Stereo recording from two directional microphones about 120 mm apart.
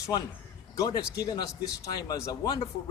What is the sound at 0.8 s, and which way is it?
A man's voice, 30° left (ahead or behind).